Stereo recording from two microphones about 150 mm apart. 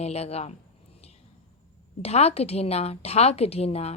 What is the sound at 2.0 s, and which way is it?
A woman's voice, 45° left (ahead or behind).